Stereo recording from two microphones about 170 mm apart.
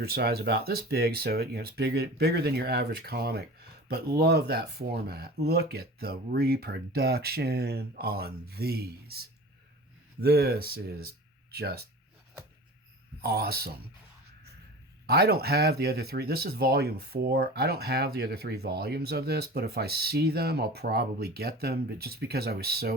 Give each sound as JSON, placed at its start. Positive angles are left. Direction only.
{"t": 0.0, "sound": "speech", "side_deg": -65}
{"t": 13.2, "sound": "speech", "side_deg": -70}
{"t": 15.0, "sound": "speech", "side_deg": -70}